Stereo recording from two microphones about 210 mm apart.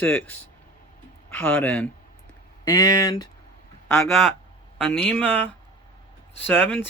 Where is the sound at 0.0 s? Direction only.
5° left (ahead or behind).